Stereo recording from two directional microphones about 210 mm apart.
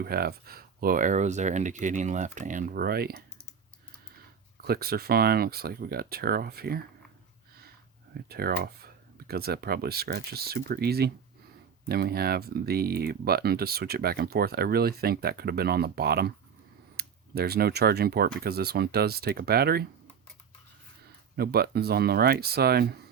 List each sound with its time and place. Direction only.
0.0 s speech: 45° right (ahead or behind)
4.6 s speech: 45° right (ahead or behind)
8.3 s speech: 50° right (ahead or behind)
21.3 s speech: 50° right (ahead or behind)